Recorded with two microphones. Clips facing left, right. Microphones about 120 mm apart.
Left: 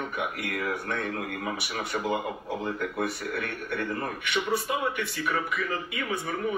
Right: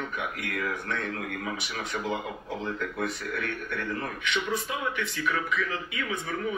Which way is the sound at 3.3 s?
55° left (ahead or behind).